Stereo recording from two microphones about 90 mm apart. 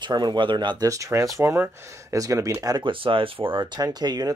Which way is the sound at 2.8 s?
70° right (ahead or behind).